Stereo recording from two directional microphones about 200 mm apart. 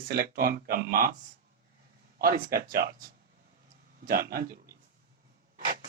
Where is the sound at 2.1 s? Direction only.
50° right (ahead or behind).